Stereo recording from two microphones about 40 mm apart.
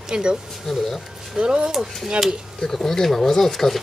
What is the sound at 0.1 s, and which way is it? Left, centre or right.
Speech, right.